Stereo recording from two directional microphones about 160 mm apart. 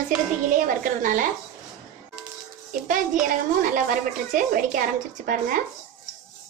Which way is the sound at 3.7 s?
55° right (ahead or behind).